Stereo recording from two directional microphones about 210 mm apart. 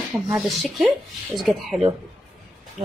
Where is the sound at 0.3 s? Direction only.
Centre (ahead or behind).